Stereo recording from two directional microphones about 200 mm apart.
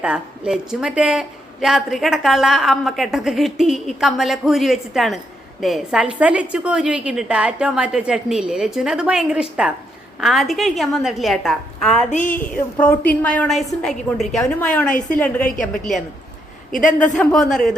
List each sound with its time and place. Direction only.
0.0 s a woman's voice: 5° right (ahead or behind)
12.1 s a man's voice: 40° left (ahead or behind)
12.5 s a woman's voice: 10° left (ahead or behind)
14.8 s a man's voice: 40° left (ahead or behind)
16.7 s a man's voice: 40° left (ahead or behind)
17.2 s a woman's voice: centre (ahead or behind)